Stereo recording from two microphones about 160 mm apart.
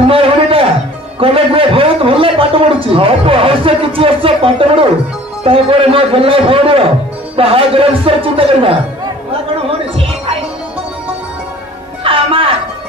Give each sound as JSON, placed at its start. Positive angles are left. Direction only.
{"t": 0.1, "sound": "a sound", "side_deg": -35}
{"t": 1.2, "sound": "a man's voice", "side_deg": -35}
{"t": 12.0, "sound": "music", "side_deg": -35}